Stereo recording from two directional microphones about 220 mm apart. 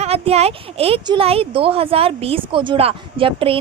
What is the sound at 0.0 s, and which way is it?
Speech, 30° right (ahead or behind).